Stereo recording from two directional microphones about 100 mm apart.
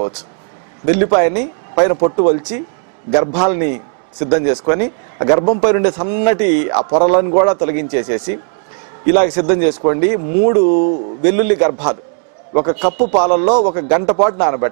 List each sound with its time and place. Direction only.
0.8 s a man's voice: 15° right (ahead or behind)